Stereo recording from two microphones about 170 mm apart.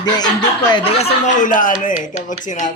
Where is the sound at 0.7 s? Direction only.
35° left (ahead or behind).